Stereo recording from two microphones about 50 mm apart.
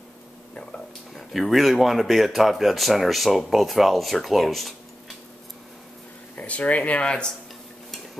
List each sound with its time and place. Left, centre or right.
1.1 s speech: centre
6.3 s speech: left